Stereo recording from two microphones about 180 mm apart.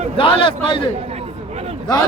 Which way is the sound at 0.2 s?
30° left (ahead or behind).